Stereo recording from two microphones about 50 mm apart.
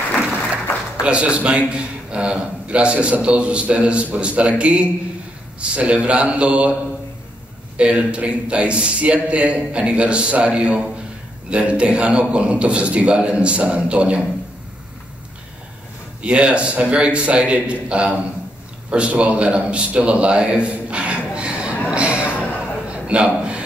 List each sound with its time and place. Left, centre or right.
0.9 s a man's voice: right
7.7 s a man's voice: right
16.2 s a man's voice: right
19.9 s a sound: right
21.9 s music: right
22.6 s a sound: right